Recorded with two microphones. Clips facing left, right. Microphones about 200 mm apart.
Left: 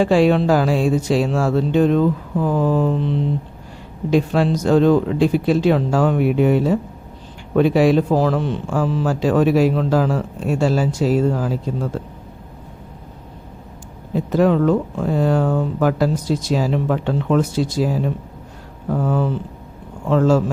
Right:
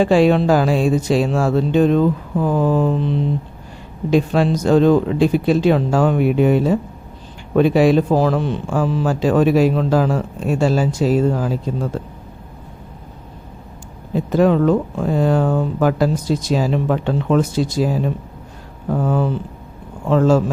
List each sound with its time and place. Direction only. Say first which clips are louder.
0.0 s speech: right 1 dB; 20° right (ahead or behind)
4.1 s a man's voice: right 1 dB; 20° right (ahead or behind)
14.3 s a man's voice: right 1 dB; 20° right (ahead or behind)